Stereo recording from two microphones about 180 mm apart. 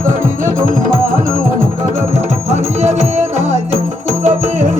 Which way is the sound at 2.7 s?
35° right (ahead or behind).